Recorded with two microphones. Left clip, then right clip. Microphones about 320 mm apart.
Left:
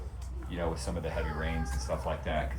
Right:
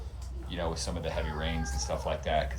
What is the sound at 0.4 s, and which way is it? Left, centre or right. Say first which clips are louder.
Speech: right 1 dB; centre.